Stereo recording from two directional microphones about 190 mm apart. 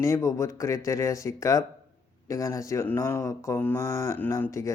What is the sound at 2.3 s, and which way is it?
Speech, 15° left (ahead or behind).